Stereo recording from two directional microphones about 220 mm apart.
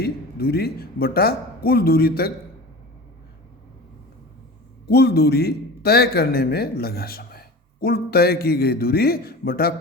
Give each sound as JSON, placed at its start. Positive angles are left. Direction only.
{"t": 0.0, "sound": "a man's voice", "side_deg": 45}
{"t": 4.9, "sound": "a man's voice", "side_deg": 45}